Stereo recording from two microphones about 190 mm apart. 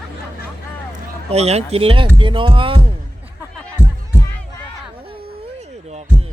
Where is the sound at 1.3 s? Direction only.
35° right (ahead or behind).